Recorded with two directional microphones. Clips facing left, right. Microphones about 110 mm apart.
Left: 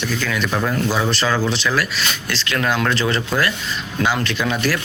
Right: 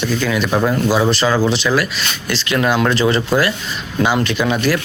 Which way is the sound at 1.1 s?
5° right (ahead or behind).